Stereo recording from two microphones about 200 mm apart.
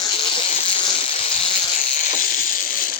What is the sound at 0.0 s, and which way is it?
Insect, 25° left (ahead or behind).